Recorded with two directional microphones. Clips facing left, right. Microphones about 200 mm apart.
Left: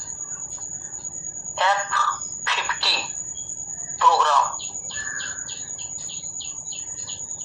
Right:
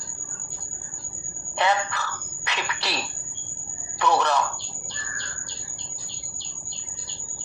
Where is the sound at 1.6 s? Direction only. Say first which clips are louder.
Even; 15° right (ahead or behind).